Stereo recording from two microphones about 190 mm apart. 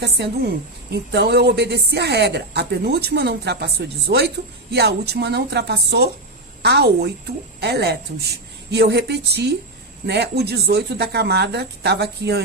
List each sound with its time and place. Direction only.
0.0 s a woman's voice: 60° right (ahead or behind)